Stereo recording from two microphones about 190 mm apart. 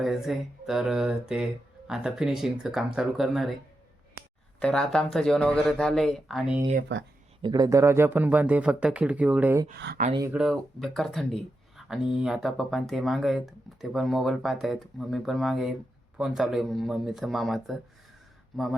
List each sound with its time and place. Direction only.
0.0 s speech: centre (ahead or behind)
4.6 s speech: 5° left (ahead or behind)
6.9 s speech: 65° right (ahead or behind)
7.4 s speech: 20° right (ahead or behind)
9.7 s speech: 60° right (ahead or behind)
10.3 s speech: centre (ahead or behind)